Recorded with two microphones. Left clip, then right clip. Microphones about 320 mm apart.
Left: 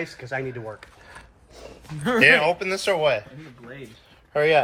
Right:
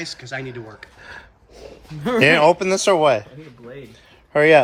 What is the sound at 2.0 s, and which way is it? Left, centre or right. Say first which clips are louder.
A man's voice: right 3 dB; centre.